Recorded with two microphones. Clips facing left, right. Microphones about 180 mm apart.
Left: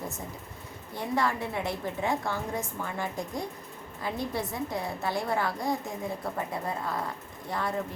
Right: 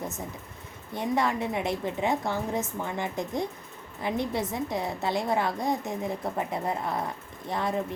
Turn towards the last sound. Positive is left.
turn(degrees=-20)  # may be behind; listen again after turning